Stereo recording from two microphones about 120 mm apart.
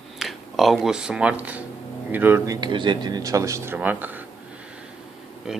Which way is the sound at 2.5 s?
40° right (ahead or behind).